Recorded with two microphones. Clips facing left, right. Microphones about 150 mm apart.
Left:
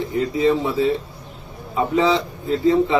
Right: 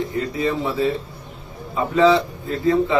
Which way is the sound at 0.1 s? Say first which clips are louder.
Left 4 dB; 20° left (ahead or behind).